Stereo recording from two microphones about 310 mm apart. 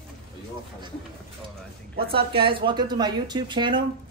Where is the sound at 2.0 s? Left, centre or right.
Centre.